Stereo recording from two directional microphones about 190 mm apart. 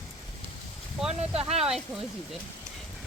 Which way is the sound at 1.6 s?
5° right (ahead or behind).